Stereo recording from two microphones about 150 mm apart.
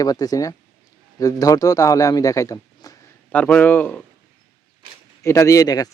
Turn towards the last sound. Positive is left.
turn(degrees=25)  # may be behind; listen again after turning